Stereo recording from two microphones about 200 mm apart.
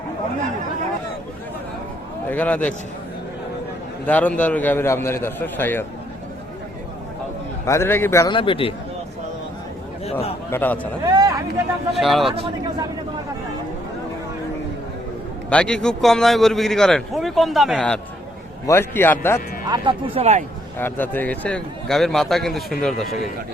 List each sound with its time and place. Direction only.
2.3 s a man's voice: 10° left (ahead or behind)
4.0 s a man's voice: 5° left (ahead or behind)
7.6 s a man's voice: 15° left (ahead or behind)
8.4 s speech: 25° left (ahead or behind)
10.5 s a man's voice: 10° left (ahead or behind)
11.0 s a sound: 20° right (ahead or behind)
11.9 s a man's voice: centre (ahead or behind)
15.4 s a man's voice: 5° left (ahead or behind)
19.6 s speech: 20° right (ahead or behind)
20.7 s a man's voice: 10° left (ahead or behind)